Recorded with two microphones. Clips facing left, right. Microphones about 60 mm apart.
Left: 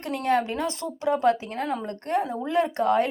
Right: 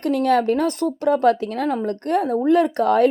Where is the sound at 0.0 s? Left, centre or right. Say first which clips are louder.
Right 6 dB; right.